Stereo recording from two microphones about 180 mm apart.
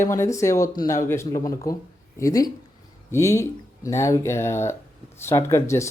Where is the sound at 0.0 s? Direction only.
15° left (ahead or behind).